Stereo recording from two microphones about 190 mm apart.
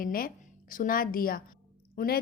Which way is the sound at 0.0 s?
50° left (ahead or behind).